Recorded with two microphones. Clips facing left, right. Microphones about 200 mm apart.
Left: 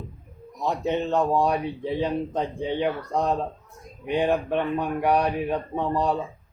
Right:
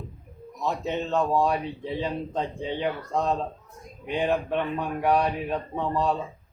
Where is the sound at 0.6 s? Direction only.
15° left (ahead or behind).